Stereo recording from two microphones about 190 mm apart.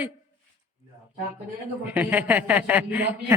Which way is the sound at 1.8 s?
10° right (ahead or behind).